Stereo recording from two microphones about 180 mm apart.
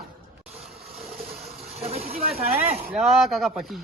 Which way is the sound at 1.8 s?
35° right (ahead or behind).